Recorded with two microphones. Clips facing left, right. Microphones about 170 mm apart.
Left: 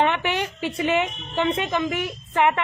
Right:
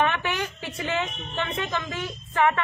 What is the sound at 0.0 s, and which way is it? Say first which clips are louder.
A woman's voice: left 3 dB; 20° left (ahead or behind).